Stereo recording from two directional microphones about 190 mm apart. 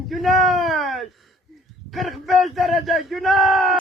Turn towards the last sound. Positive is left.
turn(degrees=0)  # may be behind; listen again after turning